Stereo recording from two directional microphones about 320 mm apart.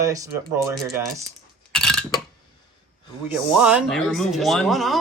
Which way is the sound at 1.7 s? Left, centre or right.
Centre.